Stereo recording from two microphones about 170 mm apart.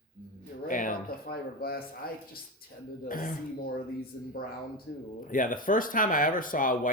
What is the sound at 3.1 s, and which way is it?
Speech, 55° left (ahead or behind).